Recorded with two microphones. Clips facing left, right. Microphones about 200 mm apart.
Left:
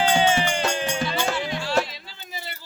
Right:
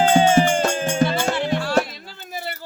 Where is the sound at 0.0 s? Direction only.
45° right (ahead or behind).